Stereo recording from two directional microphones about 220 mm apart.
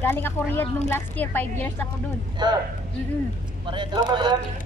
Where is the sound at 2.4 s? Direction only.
20° right (ahead or behind).